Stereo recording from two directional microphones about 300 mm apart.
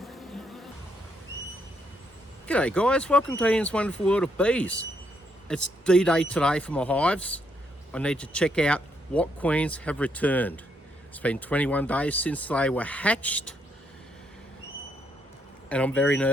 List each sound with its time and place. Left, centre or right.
0.0 s music: centre
2.5 s speech: centre
15.7 s speech: centre